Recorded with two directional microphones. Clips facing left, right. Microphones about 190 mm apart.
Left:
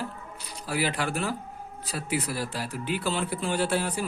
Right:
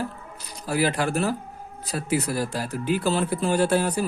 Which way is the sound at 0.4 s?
45° right (ahead or behind).